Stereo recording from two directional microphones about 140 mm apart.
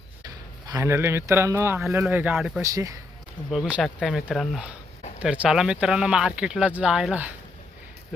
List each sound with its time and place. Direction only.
0.3 s speech: 25° right (ahead or behind)
2.6 s speech: 25° right (ahead or behind)
3.5 s speech: centre (ahead or behind)